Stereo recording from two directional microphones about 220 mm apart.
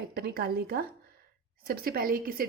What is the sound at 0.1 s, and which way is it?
A woman's voice, 45° right (ahead or behind).